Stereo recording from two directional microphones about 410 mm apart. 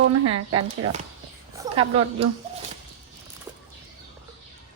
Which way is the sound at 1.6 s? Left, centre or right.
Centre.